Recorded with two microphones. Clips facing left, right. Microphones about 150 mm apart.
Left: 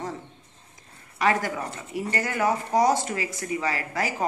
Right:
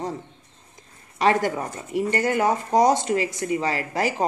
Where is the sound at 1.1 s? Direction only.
25° right (ahead or behind).